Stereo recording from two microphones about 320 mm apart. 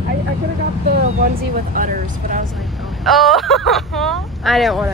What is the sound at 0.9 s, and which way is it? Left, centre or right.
Speech, right.